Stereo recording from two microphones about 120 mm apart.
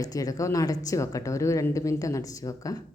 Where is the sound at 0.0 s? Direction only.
30° left (ahead or behind).